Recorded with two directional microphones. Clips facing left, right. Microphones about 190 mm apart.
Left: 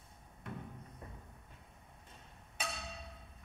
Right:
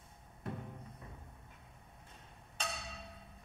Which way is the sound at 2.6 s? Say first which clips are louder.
Even; 10° left (ahead or behind).